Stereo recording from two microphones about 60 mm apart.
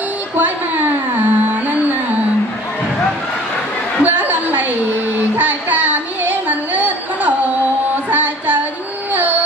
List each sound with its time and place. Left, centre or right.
0.4 s a sound: right
4.0 s chatter: right
5.4 s music: right